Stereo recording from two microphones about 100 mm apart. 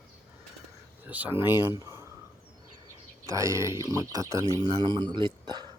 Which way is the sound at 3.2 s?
30° right (ahead or behind).